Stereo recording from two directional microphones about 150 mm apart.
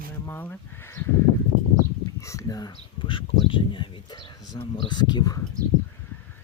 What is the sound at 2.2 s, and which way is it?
Speech, 25° left (ahead or behind).